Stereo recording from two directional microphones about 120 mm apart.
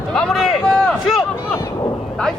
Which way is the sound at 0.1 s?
5° left (ahead or behind).